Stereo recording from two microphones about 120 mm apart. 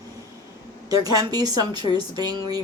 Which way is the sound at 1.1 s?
35° right (ahead or behind).